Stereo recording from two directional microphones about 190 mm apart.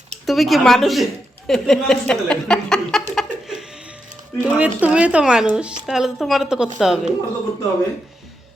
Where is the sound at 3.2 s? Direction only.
Centre (ahead or behind).